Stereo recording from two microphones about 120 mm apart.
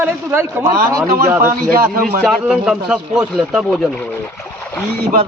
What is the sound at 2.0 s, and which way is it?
A man's voice, centre (ahead or behind).